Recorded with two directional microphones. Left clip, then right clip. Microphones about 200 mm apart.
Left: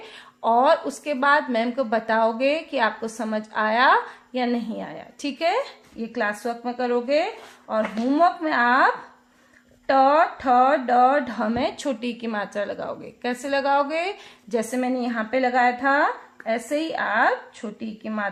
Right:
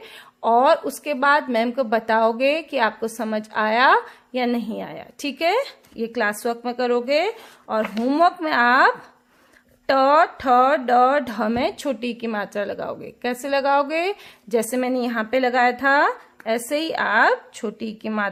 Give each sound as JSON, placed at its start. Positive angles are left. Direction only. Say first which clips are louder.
{"t": 0.4, "sound": "a woman's voice", "louder": "right 2 dB", "side_deg": -30}